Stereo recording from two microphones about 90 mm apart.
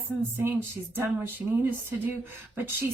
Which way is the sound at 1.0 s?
25° right (ahead or behind).